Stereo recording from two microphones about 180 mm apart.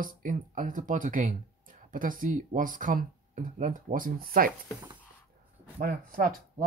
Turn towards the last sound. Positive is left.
turn(degrees=-50)  # may be behind; listen again after turning